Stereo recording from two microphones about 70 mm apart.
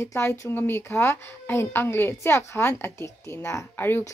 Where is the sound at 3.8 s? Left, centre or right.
Left.